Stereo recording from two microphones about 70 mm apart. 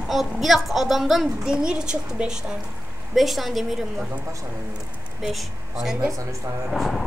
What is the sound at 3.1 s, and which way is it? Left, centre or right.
Speech, centre.